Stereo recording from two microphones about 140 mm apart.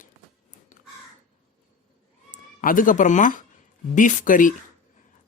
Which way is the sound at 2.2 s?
75° left (ahead or behind).